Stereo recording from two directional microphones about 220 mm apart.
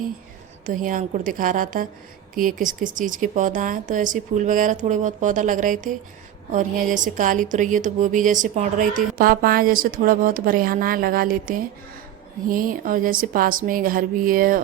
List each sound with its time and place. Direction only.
0.7 s a woman's voice: 35° right (ahead or behind)